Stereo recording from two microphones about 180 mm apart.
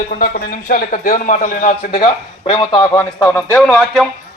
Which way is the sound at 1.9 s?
30° left (ahead or behind).